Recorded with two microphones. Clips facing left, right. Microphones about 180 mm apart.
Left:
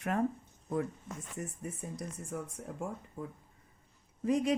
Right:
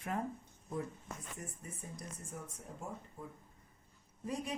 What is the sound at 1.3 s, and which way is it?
Speech, 70° left (ahead or behind).